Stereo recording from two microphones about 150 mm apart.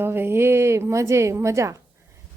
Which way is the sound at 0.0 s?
15° right (ahead or behind).